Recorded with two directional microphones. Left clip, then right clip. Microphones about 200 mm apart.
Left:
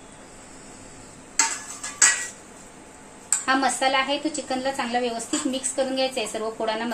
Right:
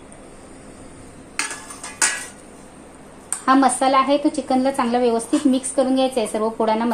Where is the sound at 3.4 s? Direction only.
35° right (ahead or behind).